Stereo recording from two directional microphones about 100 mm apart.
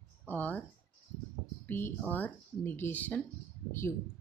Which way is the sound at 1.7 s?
20° left (ahead or behind).